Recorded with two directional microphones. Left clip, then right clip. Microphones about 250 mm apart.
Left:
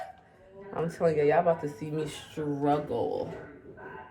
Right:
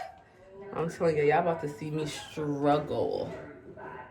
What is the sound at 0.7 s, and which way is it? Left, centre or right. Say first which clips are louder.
Speech: left 1 dB; centre.